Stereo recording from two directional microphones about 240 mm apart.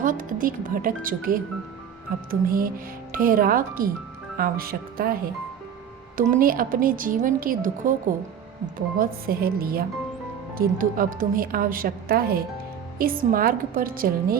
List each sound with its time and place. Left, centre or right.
0.0 s a woman's voice: right
9.0 s a woman's voice: right